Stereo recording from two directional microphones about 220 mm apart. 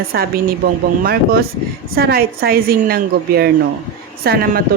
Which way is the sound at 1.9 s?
45° right (ahead or behind).